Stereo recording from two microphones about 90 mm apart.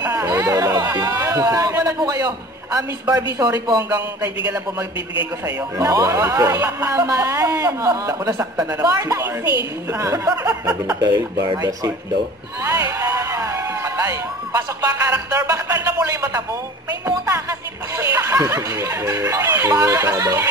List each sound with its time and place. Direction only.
0.0 s a sound: 30° right (ahead or behind)
1.7 s a man's voice: 40° right (ahead or behind)
5.8 s a man's voice: 40° right (ahead or behind)
12.6 s speech: 35° right (ahead or behind)